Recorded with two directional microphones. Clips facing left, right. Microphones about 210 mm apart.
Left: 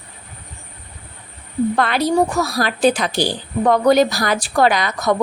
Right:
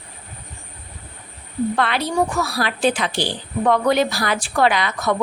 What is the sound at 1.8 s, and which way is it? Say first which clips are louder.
A woman's voice: left 4 dB; 40° left (ahead or behind).